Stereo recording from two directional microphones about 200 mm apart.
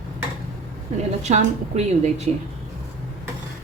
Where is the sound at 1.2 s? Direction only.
35° right (ahead or behind).